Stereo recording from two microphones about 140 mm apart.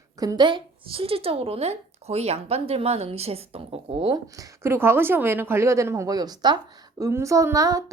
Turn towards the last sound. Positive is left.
turn(degrees=-25)  # may be behind; listen again after turning